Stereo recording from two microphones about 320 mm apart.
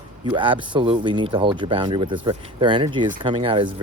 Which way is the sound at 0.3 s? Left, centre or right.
Centre.